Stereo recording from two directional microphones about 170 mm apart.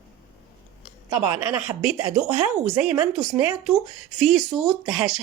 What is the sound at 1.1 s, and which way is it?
Speech, 10° right (ahead or behind).